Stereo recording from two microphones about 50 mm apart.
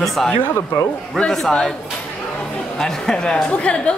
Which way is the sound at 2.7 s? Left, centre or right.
Centre.